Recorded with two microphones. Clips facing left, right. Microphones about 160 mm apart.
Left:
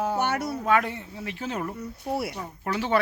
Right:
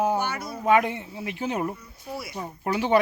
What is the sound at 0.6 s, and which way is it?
Speech, 15° right (ahead or behind).